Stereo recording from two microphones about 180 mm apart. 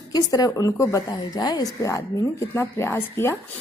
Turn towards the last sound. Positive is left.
turn(degrees=15)  # may be behind; listen again after turning